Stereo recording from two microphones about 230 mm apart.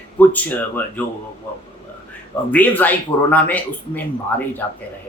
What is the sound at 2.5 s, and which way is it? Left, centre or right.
Speech, centre.